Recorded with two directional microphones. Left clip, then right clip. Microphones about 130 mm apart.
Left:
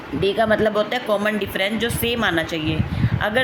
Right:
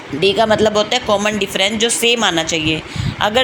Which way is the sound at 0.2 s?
20° right (ahead or behind).